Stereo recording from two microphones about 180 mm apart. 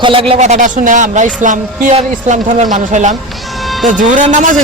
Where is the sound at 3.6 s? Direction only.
Centre (ahead or behind).